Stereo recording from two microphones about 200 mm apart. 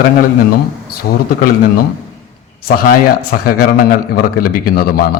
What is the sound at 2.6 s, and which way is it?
A man's voice, 50° left (ahead or behind).